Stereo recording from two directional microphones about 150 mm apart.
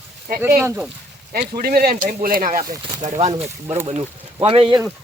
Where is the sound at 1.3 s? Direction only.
75° right (ahead or behind).